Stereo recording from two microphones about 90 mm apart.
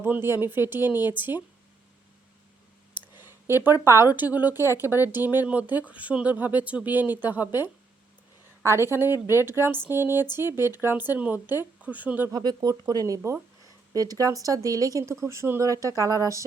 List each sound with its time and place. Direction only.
0.0 s speech: 25° right (ahead or behind)
3.2 s a sound: 25° right (ahead or behind)
3.6 s speech: 20° right (ahead or behind)
9.1 s speech: 40° left (ahead or behind)
9.9 s speech: 25° right (ahead or behind)
12.3 s speech: 50° right (ahead or behind)